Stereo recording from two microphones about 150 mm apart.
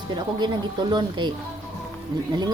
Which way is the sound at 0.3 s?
30° right (ahead or behind).